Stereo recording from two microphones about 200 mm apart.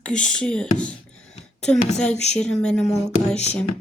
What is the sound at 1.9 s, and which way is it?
Speech, 5° left (ahead or behind).